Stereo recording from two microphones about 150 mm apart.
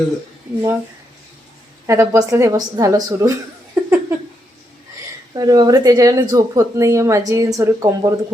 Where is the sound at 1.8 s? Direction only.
20° right (ahead or behind).